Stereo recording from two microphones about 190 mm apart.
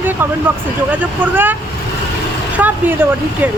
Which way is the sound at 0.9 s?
10° right (ahead or behind).